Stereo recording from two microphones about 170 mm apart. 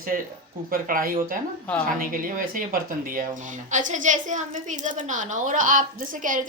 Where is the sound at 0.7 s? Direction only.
55° right (ahead or behind).